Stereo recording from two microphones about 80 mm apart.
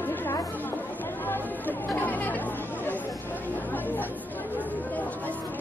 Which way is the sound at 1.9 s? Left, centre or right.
Left.